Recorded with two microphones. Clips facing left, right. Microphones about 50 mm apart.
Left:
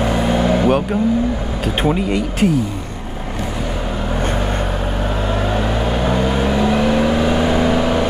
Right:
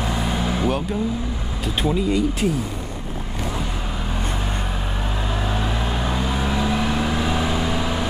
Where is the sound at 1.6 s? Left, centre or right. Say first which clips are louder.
Left 3 dB; left.